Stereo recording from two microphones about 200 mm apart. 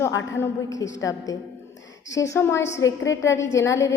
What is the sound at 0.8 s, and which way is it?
A woman's voice, 15° left (ahead or behind).